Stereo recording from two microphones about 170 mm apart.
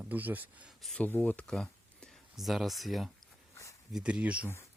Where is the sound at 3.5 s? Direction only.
20° left (ahead or behind).